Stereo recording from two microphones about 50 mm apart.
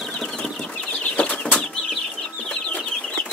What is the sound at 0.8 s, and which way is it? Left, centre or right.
Bird flight, left.